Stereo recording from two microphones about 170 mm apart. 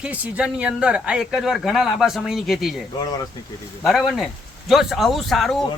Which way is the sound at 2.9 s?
20° left (ahead or behind).